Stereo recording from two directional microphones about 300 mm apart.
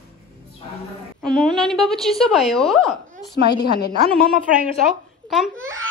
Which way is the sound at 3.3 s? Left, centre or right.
Left.